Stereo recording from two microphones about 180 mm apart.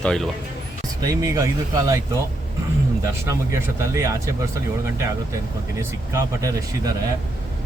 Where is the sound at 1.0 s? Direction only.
20° right (ahead or behind).